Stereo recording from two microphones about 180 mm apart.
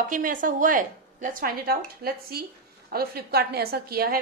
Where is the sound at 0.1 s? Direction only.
50° right (ahead or behind).